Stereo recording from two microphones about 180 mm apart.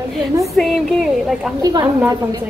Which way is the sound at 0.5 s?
Centre (ahead or behind).